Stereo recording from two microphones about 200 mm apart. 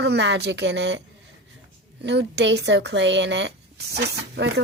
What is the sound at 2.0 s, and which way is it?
Speech, 60° right (ahead or behind).